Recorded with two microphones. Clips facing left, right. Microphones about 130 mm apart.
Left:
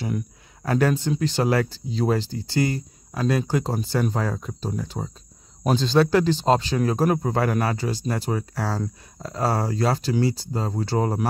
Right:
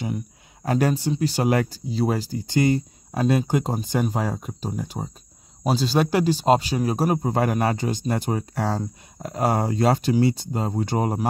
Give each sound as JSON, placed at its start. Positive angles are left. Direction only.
{"t": 0.7, "sound": "speech", "side_deg": -15}
{"t": 2.3, "sound": "speech", "side_deg": -20}